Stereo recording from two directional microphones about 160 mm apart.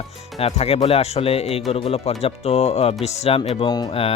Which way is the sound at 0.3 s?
40° left (ahead or behind).